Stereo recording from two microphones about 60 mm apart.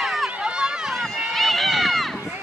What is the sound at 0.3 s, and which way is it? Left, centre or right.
Run, centre.